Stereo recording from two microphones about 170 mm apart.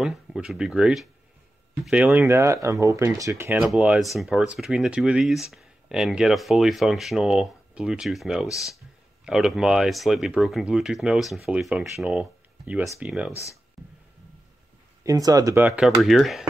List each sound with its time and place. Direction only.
0.0 s speech: centre (ahead or behind)
3.6 s speech: 5° right (ahead or behind)
13.8 s a sound: centre (ahead or behind)
15.0 s speech: 20° right (ahead or behind); by 16.4 s centre (ahead or behind)